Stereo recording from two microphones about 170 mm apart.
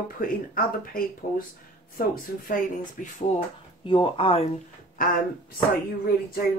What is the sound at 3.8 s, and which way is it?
Speech, 30° left (ahead or behind).